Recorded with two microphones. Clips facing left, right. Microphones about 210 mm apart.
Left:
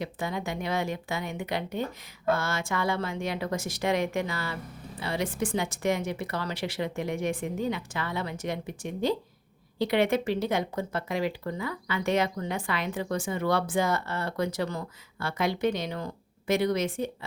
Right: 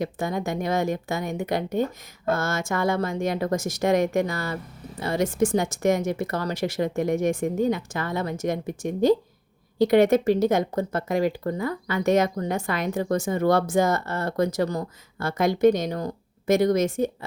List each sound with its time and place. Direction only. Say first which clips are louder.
0.0 s speech: right 5 dB; 45° right (ahead or behind)